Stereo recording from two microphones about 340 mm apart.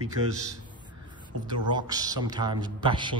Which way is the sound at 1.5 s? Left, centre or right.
Centre.